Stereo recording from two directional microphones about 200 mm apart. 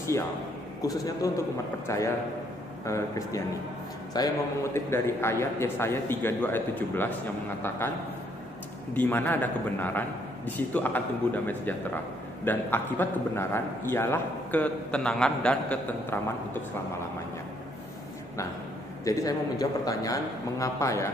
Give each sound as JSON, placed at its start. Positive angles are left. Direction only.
{"t": 0.8, "sound": "a man's voice", "side_deg": 15}
{"t": 19.0, "sound": "a man's voice", "side_deg": 15}